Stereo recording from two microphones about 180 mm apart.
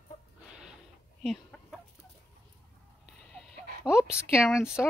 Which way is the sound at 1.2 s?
5° left (ahead or behind).